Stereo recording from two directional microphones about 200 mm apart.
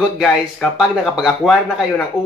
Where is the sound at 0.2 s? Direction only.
Centre (ahead or behind).